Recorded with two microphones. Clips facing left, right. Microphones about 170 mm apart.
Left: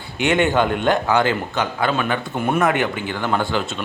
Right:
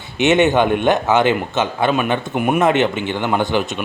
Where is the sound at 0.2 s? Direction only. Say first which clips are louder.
Right 4 dB; 20° right (ahead or behind).